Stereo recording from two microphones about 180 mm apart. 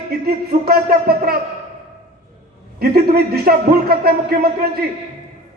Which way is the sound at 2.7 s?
60° right (ahead or behind).